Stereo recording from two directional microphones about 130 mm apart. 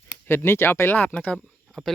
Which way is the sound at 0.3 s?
20° left (ahead or behind).